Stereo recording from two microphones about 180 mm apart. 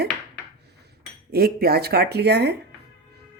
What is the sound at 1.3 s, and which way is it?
Speech, 60° right (ahead or behind).